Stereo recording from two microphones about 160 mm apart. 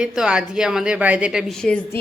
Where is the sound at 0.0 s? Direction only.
5° right (ahead or behind).